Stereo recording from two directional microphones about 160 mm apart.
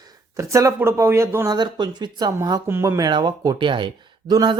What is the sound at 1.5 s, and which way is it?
Speech, 25° right (ahead or behind).